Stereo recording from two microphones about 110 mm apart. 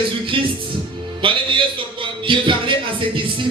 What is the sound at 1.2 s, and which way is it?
Music, 50° right (ahead or behind).